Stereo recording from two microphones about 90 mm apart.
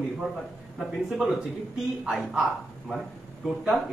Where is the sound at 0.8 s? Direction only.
Centre (ahead or behind).